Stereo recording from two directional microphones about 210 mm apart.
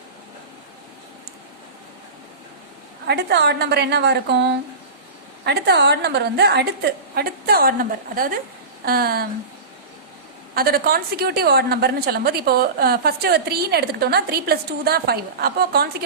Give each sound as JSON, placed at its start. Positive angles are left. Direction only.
{"t": 3.1, "sound": "a woman's voice", "side_deg": -50}
{"t": 10.5, "sound": "a woman's voice", "side_deg": -45}